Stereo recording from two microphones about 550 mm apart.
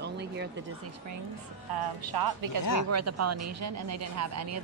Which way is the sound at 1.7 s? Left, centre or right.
Right.